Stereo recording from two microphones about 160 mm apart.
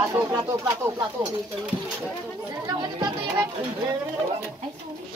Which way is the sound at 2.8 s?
20° right (ahead or behind).